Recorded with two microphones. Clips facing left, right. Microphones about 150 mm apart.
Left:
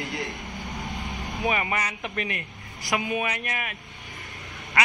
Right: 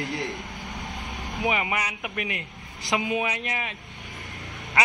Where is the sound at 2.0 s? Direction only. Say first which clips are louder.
Left 1 dB; 15° right (ahead or behind).